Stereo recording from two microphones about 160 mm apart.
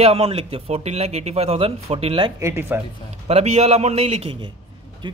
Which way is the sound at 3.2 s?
40° right (ahead or behind).